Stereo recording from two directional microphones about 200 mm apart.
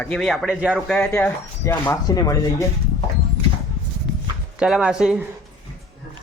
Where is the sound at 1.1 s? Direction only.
10° left (ahead or behind).